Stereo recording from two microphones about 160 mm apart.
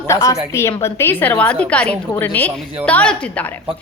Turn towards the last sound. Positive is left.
turn(degrees=10)  # may be behind; listen again after turning